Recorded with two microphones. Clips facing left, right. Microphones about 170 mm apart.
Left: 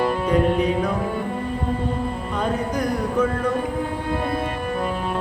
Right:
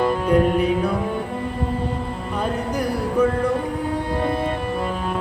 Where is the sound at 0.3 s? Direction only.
10° right (ahead or behind).